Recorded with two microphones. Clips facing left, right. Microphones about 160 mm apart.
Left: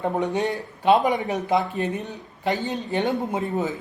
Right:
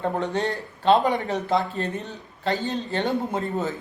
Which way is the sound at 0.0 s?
15° left (ahead or behind).